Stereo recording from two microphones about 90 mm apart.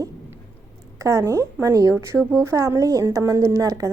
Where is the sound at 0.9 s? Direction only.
35° right (ahead or behind).